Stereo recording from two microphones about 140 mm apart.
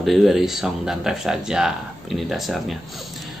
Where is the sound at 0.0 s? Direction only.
Centre (ahead or behind).